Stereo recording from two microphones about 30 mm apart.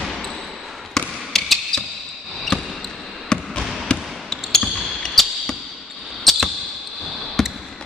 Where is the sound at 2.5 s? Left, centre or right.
Left.